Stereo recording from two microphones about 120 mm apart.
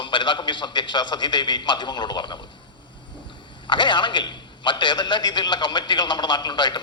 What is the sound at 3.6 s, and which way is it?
Speech, 40° left (ahead or behind).